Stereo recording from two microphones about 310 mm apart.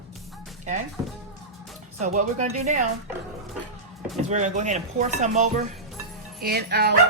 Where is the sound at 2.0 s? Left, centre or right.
Right.